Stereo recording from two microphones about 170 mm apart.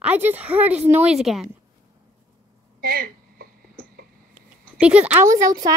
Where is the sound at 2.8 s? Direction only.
60° right (ahead or behind).